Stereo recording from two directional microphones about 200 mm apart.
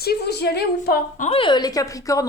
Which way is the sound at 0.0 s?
50° left (ahead or behind).